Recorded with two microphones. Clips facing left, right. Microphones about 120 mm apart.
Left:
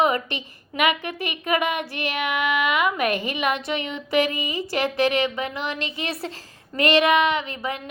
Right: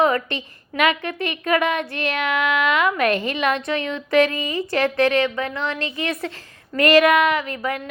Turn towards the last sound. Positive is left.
turn(degrees=25)  # may be behind; listen again after turning